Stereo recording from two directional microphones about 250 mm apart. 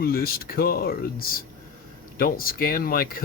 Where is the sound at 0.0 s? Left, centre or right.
Left.